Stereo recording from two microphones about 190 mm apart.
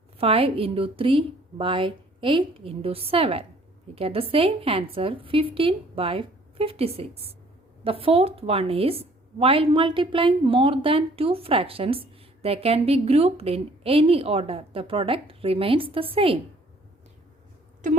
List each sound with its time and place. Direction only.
0.2 s a woman's voice: 30° right (ahead or behind)
17.8 s speech: 40° right (ahead or behind)